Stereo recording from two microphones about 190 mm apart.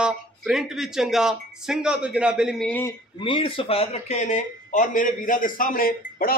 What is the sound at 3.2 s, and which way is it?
A man's voice, 25° left (ahead or behind).